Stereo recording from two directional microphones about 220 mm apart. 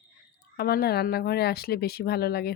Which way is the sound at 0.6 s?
45° left (ahead or behind).